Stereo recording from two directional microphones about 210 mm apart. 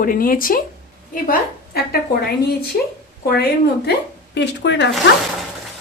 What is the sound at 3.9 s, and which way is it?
A woman's voice, 55° left (ahead or behind).